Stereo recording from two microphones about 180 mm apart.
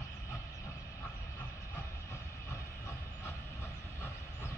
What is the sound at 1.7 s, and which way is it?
Train, 15° left (ahead or behind).